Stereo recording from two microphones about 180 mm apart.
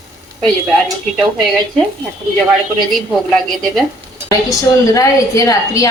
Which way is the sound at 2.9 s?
Centre (ahead or behind).